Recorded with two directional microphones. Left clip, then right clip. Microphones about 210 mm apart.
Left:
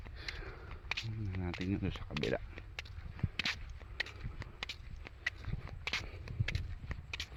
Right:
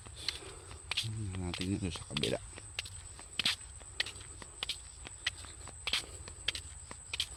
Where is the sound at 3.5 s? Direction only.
40° left (ahead or behind).